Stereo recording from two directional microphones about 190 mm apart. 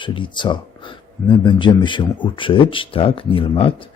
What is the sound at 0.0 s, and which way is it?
Speech, 25° left (ahead or behind).